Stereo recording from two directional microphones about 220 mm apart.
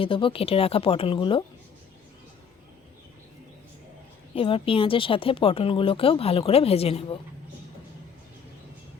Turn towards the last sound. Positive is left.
turn(degrees=25)  # may be behind; listen again after turning